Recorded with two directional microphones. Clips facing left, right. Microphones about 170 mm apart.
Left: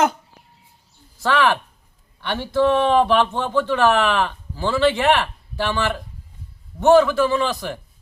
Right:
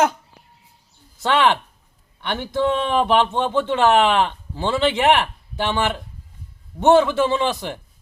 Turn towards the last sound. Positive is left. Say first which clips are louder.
# even
turn(degrees=-20)  # may be behind; listen again after turning